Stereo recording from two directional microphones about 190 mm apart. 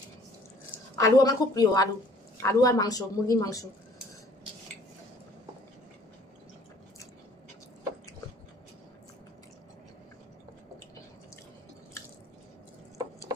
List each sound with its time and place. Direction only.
0.9 s a woman's voice: 15° left (ahead or behind)